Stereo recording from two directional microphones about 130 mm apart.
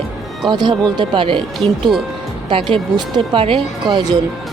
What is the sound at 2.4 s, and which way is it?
Speech, 40° right (ahead or behind).